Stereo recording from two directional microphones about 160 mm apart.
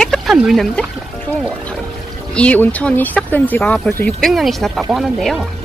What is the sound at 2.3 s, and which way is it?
Speech, 10° left (ahead or behind).